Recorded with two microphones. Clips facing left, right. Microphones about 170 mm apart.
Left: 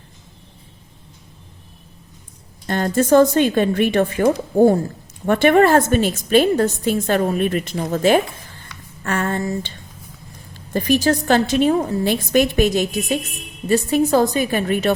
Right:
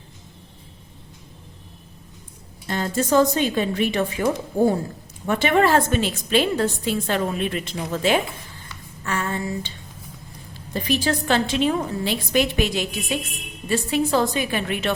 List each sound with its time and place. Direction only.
2.6 s a woman's voice: 55° left (ahead or behind)
9.0 s a sound: 55° left (ahead or behind)
10.8 s a woman's voice: 45° left (ahead or behind)